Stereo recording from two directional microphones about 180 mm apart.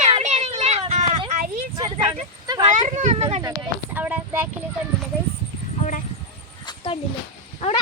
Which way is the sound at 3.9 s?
10° right (ahead or behind).